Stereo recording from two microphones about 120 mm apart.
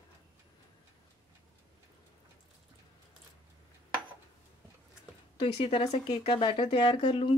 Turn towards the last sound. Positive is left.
turn(degrees=45)  # may be behind; listen again after turning